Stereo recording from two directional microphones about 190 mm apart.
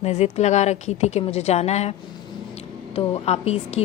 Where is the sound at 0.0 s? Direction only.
35° left (ahead or behind).